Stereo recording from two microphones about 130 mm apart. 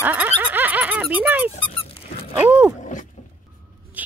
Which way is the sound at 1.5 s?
45° left (ahead or behind).